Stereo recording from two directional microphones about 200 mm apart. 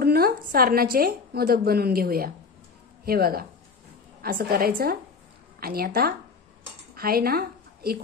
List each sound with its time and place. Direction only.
0.0 s a woman's voice: 50° right (ahead or behind)